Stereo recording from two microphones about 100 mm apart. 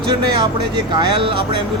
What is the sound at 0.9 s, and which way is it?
Speech, 55° right (ahead or behind).